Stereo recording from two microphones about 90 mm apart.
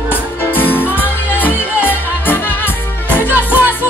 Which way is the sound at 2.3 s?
25° left (ahead or behind).